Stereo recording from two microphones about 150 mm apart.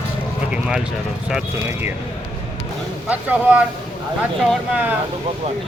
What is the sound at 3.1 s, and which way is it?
Speech, 10° right (ahead or behind).